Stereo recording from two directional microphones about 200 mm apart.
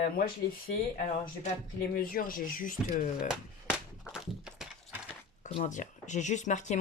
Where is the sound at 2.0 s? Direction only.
45° left (ahead or behind).